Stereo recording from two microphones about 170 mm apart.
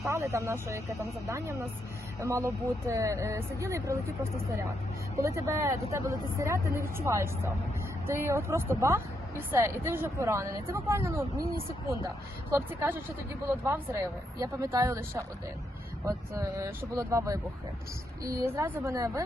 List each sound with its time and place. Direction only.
0.0 s speech: 15° right (ahead or behind)